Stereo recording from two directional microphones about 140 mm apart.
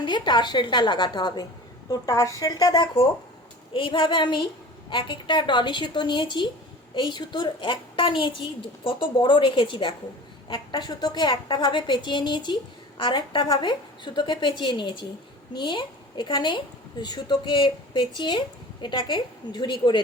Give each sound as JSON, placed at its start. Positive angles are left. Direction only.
{"t": 0.0, "sound": "a woman's voice", "side_deg": 35}